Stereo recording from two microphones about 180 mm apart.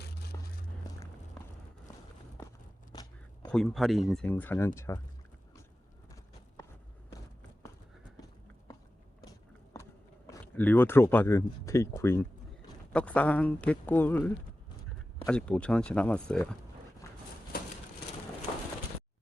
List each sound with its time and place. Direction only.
2.9 s biting: 20° left (ahead or behind)
3.5 s speech: centre (ahead or behind)
10.2 s speech: 15° left (ahead or behind)
17.0 s a sound: 15° left (ahead or behind)